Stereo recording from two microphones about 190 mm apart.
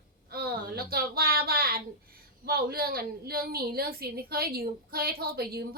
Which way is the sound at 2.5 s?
55° right (ahead or behind).